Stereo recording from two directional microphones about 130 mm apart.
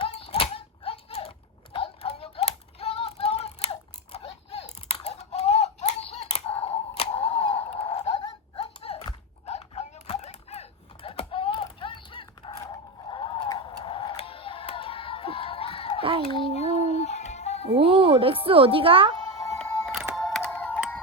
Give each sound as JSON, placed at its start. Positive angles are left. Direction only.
{"t": 0.0, "sound": "a sound", "side_deg": 45}
{"t": 9.5, "sound": "typewriter", "side_deg": 55}
{"t": 12.4, "sound": "a sound", "side_deg": 40}
{"t": 13.1, "sound": "music", "side_deg": 40}
{"t": 16.0, "sound": "child singing", "side_deg": -45}
{"t": 16.5, "sound": "music", "side_deg": 55}
{"t": 17.7, "sound": "music", "side_deg": -45}
{"t": 19.5, "sound": "music", "side_deg": 0}